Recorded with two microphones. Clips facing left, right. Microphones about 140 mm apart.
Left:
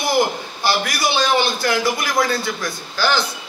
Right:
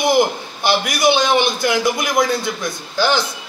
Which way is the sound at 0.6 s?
20° right (ahead or behind).